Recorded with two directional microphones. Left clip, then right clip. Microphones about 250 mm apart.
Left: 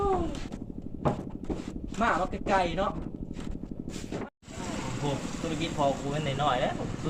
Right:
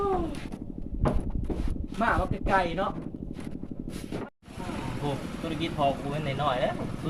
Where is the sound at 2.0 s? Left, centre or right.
Centre.